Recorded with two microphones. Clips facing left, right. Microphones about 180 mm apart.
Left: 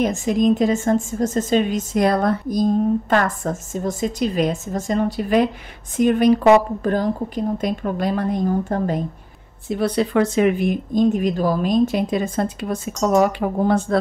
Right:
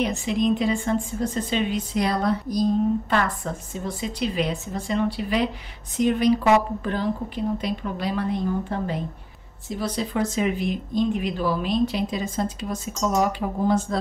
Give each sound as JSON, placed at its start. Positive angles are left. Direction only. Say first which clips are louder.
{"t": 0.0, "sound": "a woman's voice", "louder": "left 5 dB", "side_deg": 45}
{"t": 9.7, "sound": "speech", "louder": "left 7 dB", "side_deg": 60}